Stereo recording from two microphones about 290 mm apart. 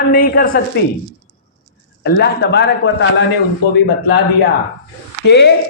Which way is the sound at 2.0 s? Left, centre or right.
Left.